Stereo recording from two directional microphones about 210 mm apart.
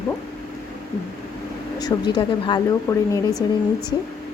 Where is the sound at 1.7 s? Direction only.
20° left (ahead or behind).